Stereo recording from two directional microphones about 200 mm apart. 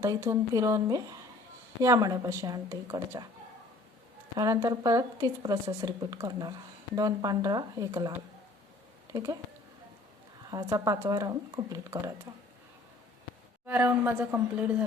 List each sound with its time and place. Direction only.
0.0 s speech: 15° right (ahead or behind)
4.4 s speech: 20° right (ahead or behind)
9.1 s speech: 20° right (ahead or behind)
10.5 s speech: 20° right (ahead or behind)
13.7 s speech: 10° right (ahead or behind)